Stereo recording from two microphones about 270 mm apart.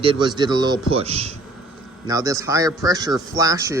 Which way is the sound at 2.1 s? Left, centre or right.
Centre.